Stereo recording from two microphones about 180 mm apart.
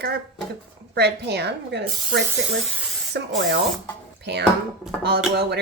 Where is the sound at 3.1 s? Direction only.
70° right (ahead or behind).